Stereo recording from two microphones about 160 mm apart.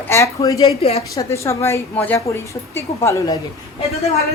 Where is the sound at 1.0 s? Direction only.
20° left (ahead or behind).